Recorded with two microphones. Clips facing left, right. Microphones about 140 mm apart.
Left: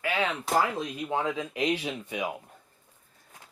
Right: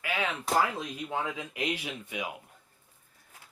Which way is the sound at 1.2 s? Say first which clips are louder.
Left 5 dB; 30° left (ahead or behind).